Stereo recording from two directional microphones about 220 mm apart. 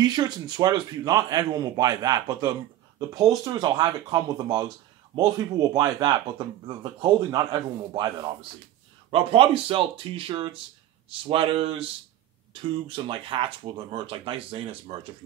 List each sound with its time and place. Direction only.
0.0 s speech: 20° right (ahead or behind)